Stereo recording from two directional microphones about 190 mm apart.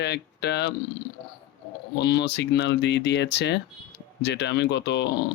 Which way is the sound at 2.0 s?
60° left (ahead or behind).